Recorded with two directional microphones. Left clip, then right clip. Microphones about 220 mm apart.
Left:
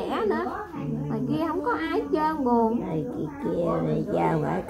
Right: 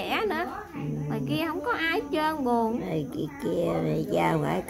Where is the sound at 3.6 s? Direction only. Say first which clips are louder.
Left 1 dB; 20° right (ahead or behind).